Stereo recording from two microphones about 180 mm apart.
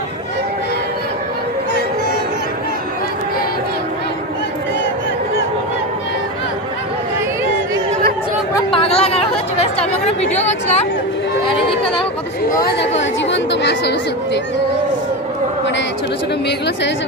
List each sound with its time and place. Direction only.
8.5 s chatter: 30° left (ahead or behind)
10.4 s a woman's voice: 40° left (ahead or behind)
11.4 s a sound: 30° left (ahead or behind)
13.3 s speech: 75° left (ahead or behind)
16.5 s speech: 70° left (ahead or behind)